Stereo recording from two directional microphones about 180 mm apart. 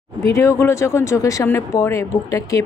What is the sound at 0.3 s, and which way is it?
Speech, 15° left (ahead or behind).